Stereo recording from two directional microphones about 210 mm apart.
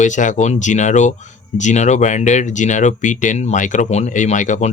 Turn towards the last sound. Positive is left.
turn(degrees=35)  # may be behind; listen again after turning